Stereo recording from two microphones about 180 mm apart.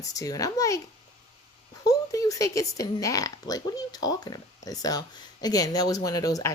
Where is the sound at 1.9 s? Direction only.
20° left (ahead or behind).